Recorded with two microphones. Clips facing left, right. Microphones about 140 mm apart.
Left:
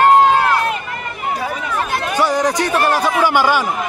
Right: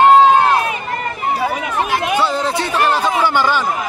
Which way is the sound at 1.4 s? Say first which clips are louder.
Right 4 dB; 10° right (ahead or behind).